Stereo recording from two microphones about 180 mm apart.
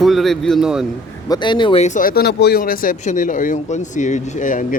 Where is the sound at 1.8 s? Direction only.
45° left (ahead or behind).